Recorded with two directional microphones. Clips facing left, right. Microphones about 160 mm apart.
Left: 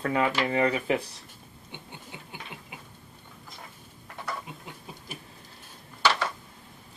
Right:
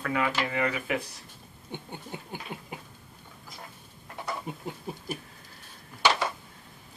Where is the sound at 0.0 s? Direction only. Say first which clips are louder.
Left 3 dB; 35° left (ahead or behind).